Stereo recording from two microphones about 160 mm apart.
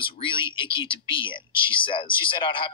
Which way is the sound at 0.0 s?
30° left (ahead or behind).